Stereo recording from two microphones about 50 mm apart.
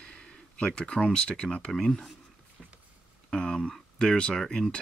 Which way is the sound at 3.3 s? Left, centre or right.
Centre.